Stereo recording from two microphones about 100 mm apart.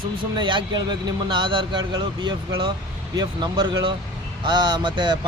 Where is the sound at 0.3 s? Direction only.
55° right (ahead or behind).